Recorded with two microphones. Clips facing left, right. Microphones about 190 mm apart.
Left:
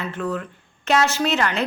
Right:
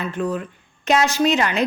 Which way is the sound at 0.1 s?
15° right (ahead or behind).